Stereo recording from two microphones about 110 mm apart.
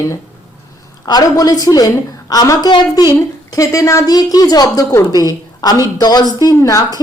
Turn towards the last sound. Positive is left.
turn(degrees=35)  # may be behind; listen again after turning